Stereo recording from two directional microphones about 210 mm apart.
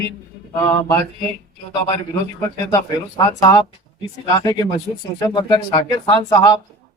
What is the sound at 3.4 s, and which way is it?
Speech, 20° left (ahead or behind).